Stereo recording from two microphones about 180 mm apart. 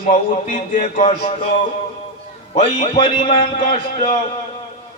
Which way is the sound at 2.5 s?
30° left (ahead or behind).